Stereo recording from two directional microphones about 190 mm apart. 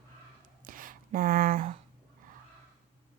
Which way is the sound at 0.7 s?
45° right (ahead or behind).